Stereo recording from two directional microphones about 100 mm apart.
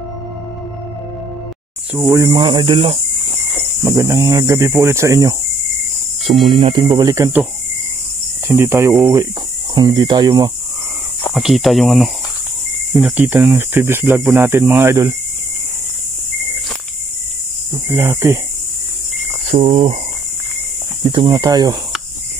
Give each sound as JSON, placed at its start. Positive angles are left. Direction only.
{"t": 2.1, "sound": "speech", "side_deg": -40}
{"t": 2.4, "sound": "speech", "side_deg": -60}
{"t": 3.8, "sound": "speech", "side_deg": -30}
{"t": 6.4, "sound": "speech", "side_deg": -60}
{"t": 6.9, "sound": "speech", "side_deg": -35}
{"t": 8.5, "sound": "speech", "side_deg": -30}
{"t": 9.8, "sound": "speech", "side_deg": -45}
{"t": 11.3, "sound": "speech", "side_deg": 0}
{"t": 13.0, "sound": "speech", "side_deg": -15}
{"t": 17.8, "sound": "speech", "side_deg": -25}
{"t": 19.5, "sound": "speech", "side_deg": -70}
{"t": 21.0, "sound": "speech", "side_deg": -55}
{"t": 21.3, "sound": "speech", "side_deg": -40}